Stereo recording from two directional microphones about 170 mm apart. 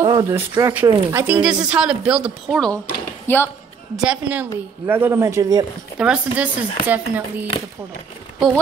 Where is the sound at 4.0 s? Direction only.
5° right (ahead or behind).